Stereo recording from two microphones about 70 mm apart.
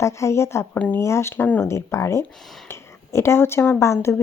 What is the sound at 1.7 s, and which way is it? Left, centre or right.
Speech, left.